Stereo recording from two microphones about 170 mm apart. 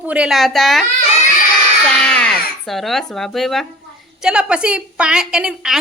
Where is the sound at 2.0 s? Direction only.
5° left (ahead or behind).